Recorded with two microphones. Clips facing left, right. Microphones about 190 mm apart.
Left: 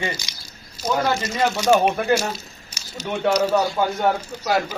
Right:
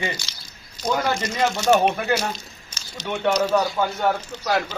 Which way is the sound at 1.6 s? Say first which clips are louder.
Left 1 dB; 10° left (ahead or behind).